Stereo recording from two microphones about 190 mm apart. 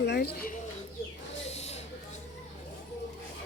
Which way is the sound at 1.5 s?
35° left (ahead or behind).